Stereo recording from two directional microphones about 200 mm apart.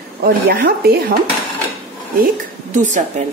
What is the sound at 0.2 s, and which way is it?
Speech, 50° right (ahead or behind).